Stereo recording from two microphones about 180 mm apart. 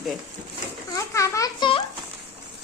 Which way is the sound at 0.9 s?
15° left (ahead or behind).